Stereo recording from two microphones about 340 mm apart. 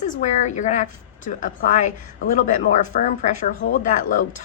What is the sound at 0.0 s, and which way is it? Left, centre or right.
A woman's voice, left.